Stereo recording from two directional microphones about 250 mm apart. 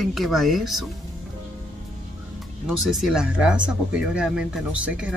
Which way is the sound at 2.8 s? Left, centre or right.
Centre.